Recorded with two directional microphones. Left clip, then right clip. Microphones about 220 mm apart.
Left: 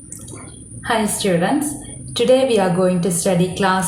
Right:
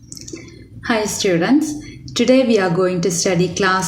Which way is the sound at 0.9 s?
45° right (ahead or behind).